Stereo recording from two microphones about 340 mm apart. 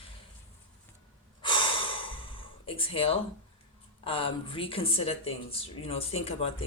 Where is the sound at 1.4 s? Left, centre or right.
Centre.